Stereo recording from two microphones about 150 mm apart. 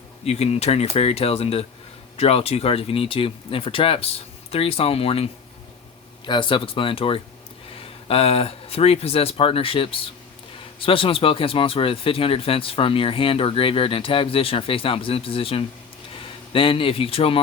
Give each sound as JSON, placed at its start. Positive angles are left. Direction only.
{"t": 0.3, "sound": "a man's voice", "side_deg": 45}